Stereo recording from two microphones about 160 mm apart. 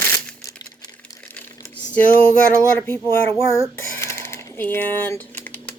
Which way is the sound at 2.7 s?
15° left (ahead or behind).